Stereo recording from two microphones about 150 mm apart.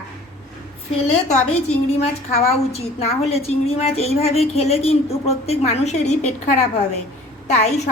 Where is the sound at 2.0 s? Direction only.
45° left (ahead or behind).